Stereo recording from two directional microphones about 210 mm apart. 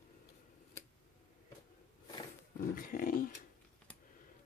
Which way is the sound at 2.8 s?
40° left (ahead or behind).